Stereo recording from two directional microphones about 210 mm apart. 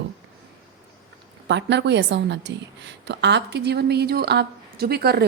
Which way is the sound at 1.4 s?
55° right (ahead or behind).